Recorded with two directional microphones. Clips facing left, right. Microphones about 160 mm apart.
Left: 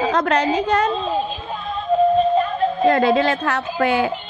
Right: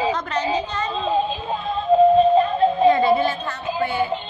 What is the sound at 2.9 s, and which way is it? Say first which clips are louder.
A woman's voice: left 3 dB; 90° left.